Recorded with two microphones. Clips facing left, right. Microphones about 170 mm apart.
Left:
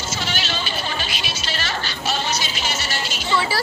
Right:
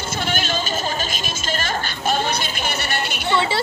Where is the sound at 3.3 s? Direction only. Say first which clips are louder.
Right 1 dB; 25° right (ahead or behind).